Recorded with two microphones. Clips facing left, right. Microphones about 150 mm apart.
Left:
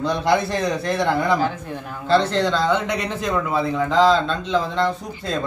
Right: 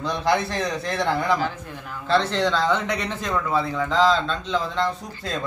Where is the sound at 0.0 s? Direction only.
10° left (ahead or behind).